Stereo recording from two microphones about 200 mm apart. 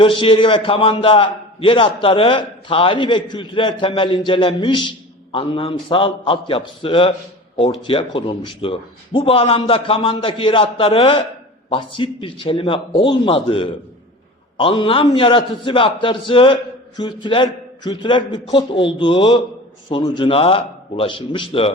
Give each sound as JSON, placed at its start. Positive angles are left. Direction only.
{"t": 0.0, "sound": "a man's voice", "side_deg": 25}